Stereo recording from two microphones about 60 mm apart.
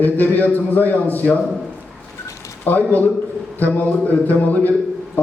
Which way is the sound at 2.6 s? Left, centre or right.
Left.